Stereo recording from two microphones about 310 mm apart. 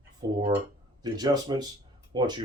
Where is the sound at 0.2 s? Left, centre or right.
Centre.